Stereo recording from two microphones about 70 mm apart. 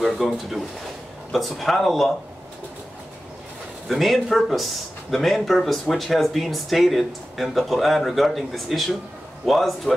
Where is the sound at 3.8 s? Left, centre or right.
Centre.